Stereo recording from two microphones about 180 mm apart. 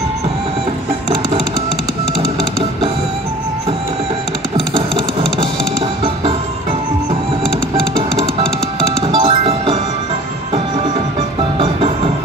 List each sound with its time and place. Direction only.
9.0 s music: 30° right (ahead or behind)
11.5 s music: 30° right (ahead or behind)